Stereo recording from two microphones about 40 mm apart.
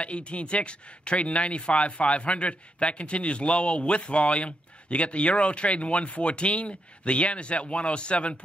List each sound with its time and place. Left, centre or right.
0.0 s speech: left